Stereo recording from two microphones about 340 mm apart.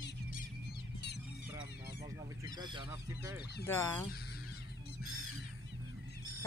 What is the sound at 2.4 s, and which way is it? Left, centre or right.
Speech, centre.